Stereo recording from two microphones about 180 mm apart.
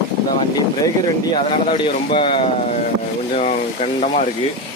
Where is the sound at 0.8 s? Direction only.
25° left (ahead or behind).